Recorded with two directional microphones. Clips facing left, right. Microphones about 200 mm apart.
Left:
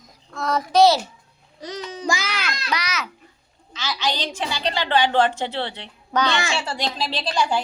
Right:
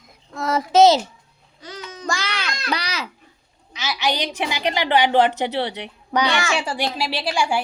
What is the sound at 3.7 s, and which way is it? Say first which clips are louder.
A woman's voice: right 2 dB; 15° right (ahead or behind).